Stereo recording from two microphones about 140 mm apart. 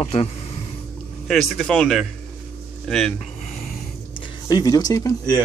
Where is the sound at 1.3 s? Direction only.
Centre (ahead or behind).